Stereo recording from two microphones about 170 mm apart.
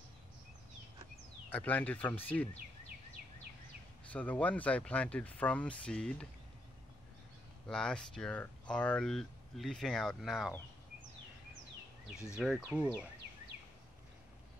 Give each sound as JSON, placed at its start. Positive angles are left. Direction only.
{"t": 1.5, "sound": "speech", "side_deg": 10}
{"t": 4.1, "sound": "speech", "side_deg": 10}
{"t": 7.6, "sound": "speech", "side_deg": 5}
{"t": 12.3, "sound": "speech", "side_deg": -5}